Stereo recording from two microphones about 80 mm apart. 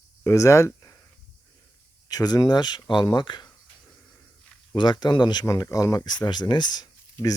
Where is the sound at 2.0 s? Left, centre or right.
Left.